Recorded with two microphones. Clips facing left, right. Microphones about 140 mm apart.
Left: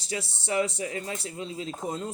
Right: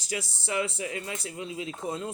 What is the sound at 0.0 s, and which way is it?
A man's voice, 30° left (ahead or behind).